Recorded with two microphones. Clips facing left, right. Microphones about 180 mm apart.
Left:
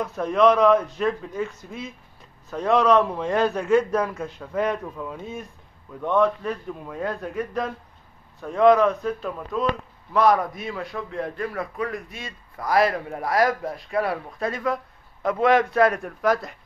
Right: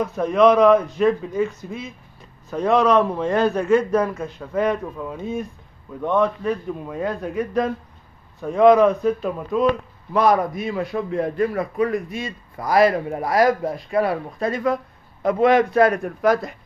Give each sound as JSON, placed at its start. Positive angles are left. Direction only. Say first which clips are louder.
{"t": 0.0, "sound": "a man's voice", "louder": "right 3 dB", "side_deg": -5}
{"t": 13.5, "sound": "a man's voice", "louder": "right 6 dB", "side_deg": -15}
{"t": 13.8, "sound": "speech", "louder": "right 4 dB", "side_deg": 0}